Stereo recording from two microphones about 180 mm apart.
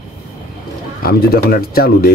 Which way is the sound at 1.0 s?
55° left (ahead or behind).